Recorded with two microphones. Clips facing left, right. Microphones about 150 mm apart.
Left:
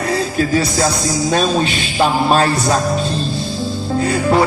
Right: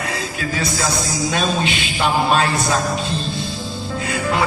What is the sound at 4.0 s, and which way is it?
Music, 40° left (ahead or behind).